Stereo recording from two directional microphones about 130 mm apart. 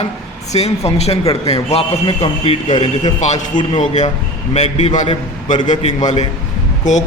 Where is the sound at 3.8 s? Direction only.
65° left (ahead or behind).